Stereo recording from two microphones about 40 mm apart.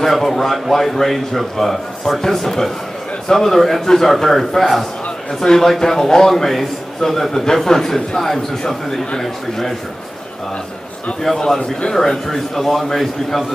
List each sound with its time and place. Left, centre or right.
0.0 s a man's voice: centre
5.4 s a man's voice: centre
11.3 s a man's voice: centre